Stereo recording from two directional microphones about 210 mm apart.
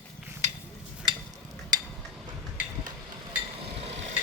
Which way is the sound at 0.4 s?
35° right (ahead or behind).